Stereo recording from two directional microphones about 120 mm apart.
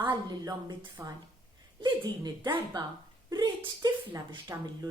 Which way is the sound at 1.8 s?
35° right (ahead or behind).